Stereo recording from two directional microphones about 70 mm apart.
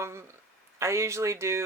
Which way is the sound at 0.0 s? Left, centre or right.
Right.